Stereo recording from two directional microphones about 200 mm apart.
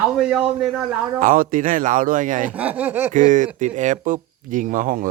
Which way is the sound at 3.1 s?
40° right (ahead or behind).